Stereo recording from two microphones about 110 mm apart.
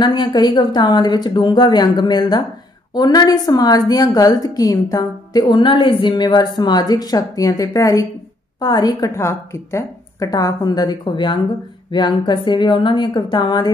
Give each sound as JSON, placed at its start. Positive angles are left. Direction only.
{"t": 0.0, "sound": "a woman's voice", "side_deg": 40}
{"t": 9.1, "sound": "a woman's voice", "side_deg": 25}